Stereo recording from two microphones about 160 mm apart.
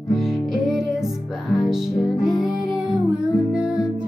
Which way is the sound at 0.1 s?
Centre (ahead or behind).